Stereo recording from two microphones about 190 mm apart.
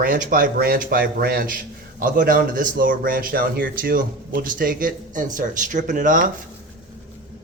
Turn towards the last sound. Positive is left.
turn(degrees=-45)  # may be behind; listen again after turning